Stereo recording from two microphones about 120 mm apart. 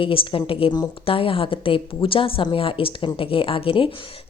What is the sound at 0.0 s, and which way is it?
A woman's voice, 50° left (ahead or behind).